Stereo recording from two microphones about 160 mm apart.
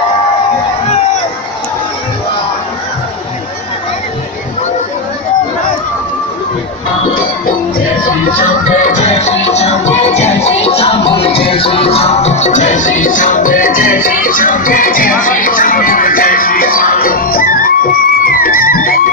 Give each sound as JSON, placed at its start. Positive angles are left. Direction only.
{"t": 8.6, "sound": "music", "side_deg": 50}